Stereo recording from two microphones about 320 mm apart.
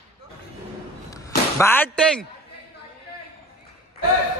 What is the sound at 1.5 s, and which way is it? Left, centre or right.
Speech, centre.